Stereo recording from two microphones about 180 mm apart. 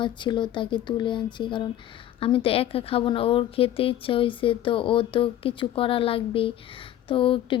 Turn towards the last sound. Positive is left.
turn(degrees=30)  # may be behind; listen again after turning